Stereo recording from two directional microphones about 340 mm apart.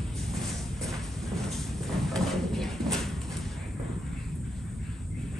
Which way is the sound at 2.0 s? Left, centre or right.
Centre.